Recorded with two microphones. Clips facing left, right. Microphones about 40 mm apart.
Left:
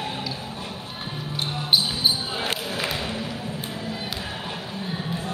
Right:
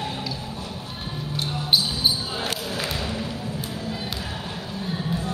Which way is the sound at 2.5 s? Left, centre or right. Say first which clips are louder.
Left 1 dB; centre.